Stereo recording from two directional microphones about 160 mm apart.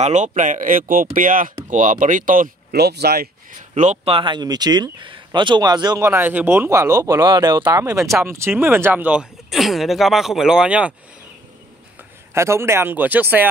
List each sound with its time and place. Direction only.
0.0 s speech: 45° right (ahead or behind); by 3.3 s 80° right
3.7 s speech: 45° right (ahead or behind); by 10.9 s 5° right (ahead or behind)
12.4 s speech: 15° right (ahead or behind)